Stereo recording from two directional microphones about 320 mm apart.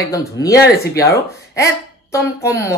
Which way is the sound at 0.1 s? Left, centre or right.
Centre.